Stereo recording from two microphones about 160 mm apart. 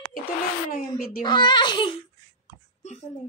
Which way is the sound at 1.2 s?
30° left (ahead or behind).